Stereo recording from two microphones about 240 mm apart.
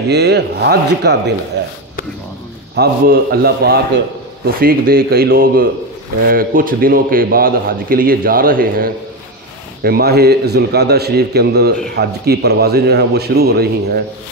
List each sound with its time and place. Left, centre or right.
0.1 s a man's voice: right
1.6 s a sound: right
2.7 s a man's voice: right